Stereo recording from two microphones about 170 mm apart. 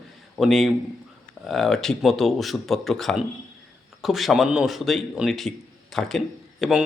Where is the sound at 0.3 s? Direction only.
Centre (ahead or behind).